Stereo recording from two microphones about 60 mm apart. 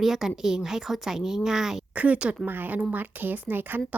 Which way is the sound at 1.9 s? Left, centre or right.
Right.